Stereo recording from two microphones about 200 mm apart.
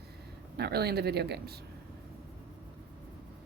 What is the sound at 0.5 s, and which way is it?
Speech, 55° right (ahead or behind).